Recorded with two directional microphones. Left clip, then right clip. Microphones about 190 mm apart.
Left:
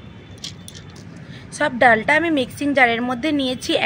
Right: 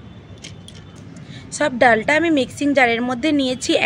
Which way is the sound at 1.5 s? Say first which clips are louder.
Even; 20° right (ahead or behind).